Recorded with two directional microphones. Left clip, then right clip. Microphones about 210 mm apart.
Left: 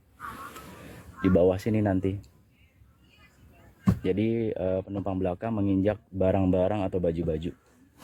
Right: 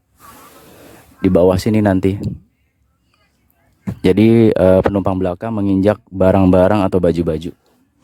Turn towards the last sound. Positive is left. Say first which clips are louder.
# right 12 dB
turn(degrees=-40)  # may be behind; listen again after turning